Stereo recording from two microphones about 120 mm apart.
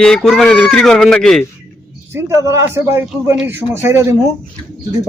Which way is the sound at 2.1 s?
20° right (ahead or behind).